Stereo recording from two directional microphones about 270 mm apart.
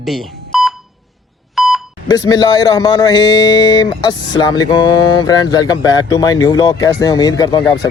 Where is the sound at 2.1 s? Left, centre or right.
Centre.